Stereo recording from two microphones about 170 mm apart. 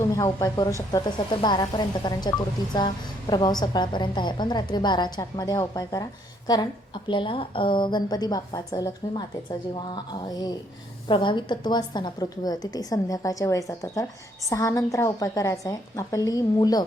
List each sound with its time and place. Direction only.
0.0 s a woman's voice: 20° left (ahead or behind)